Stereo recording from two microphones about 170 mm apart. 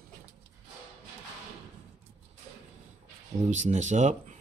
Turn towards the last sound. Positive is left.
turn(degrees=-45)  # may be behind; listen again after turning